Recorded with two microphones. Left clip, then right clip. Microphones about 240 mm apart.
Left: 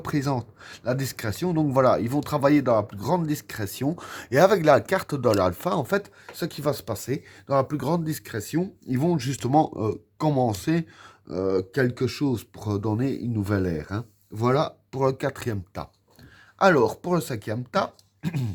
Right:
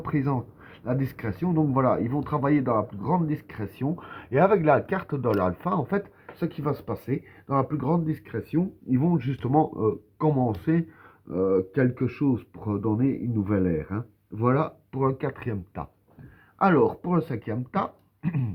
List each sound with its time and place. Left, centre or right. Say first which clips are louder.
0.0 s speech: left 1 dB; left